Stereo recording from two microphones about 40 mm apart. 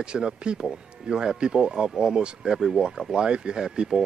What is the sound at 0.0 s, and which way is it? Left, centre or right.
Speech, right.